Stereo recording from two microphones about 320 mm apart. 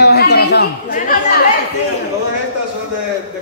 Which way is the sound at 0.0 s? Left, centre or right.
Left.